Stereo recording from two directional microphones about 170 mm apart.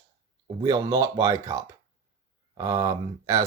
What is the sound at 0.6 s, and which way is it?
Speech, 20° right (ahead or behind).